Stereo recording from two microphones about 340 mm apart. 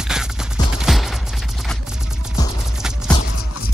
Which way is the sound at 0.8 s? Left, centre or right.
Centre.